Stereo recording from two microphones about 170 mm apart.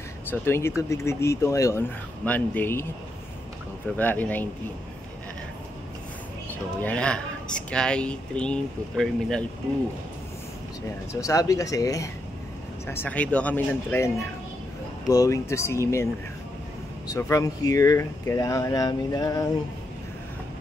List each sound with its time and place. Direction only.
0.3 s speech: 15° left (ahead or behind)
3.9 s speech: 10° left (ahead or behind)
6.8 s speech: 5° left (ahead or behind)
11.1 s speech: 20° left (ahead or behind)
17.1 s speech: 20° left (ahead or behind)